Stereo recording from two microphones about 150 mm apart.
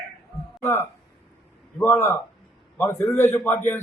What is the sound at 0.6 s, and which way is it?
A man's voice, 15° left (ahead or behind).